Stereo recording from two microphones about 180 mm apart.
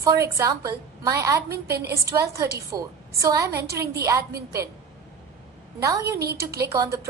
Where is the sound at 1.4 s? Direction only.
60° right (ahead or behind).